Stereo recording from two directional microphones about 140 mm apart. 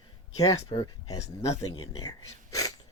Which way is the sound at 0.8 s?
25° left (ahead or behind).